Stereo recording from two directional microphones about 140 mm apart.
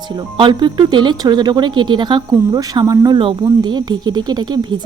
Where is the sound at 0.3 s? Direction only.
35° right (ahead or behind).